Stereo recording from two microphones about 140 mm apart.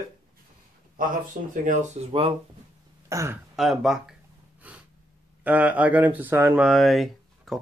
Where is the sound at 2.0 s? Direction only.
50° right (ahead or behind).